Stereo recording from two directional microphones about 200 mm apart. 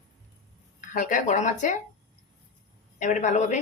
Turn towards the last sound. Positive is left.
turn(degrees=35)  # may be behind; listen again after turning